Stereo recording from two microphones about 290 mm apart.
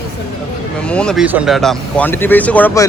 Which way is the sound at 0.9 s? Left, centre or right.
Centre.